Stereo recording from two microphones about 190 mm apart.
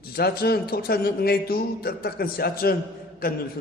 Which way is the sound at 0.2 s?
55° left (ahead or behind).